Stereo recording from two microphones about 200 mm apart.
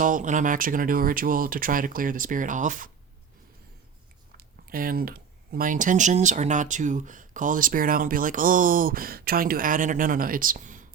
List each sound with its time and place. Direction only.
0.0 s speech: 40° right (ahead or behind)
4.4 s speech: 45° right (ahead or behind)